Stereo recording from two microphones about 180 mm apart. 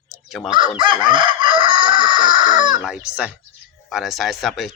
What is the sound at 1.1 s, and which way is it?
Chicken, 25° right (ahead or behind).